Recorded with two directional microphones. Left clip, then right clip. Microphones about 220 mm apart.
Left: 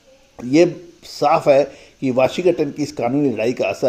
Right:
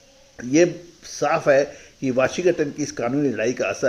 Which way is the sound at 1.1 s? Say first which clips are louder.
Left 4 dB; 20° left (ahead or behind).